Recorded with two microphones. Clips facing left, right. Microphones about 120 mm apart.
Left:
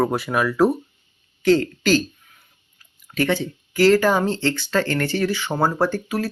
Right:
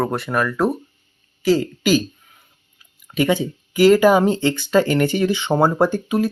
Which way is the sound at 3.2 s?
15° right (ahead or behind).